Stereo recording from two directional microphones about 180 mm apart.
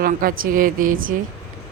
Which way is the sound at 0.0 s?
50° right (ahead or behind).